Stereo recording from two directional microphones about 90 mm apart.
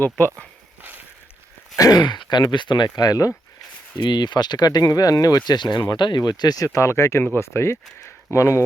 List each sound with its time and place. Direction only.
1.8 s speech: 50° left (ahead or behind)
4.0 s speech: 55° left (ahead or behind)
5.5 s speech: 55° left (ahead or behind)
6.7 s speech: 30° left (ahead or behind)